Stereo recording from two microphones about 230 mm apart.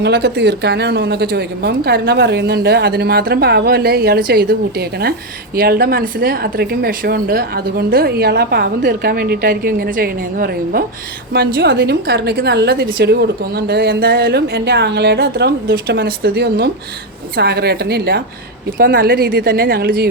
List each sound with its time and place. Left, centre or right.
0.0 s a woman's voice: right